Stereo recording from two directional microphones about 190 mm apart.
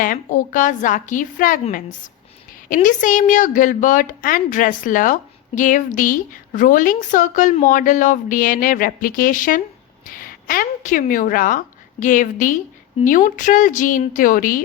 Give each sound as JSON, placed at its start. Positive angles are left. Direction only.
{"t": 0.0, "sound": "a woman's voice", "side_deg": 45}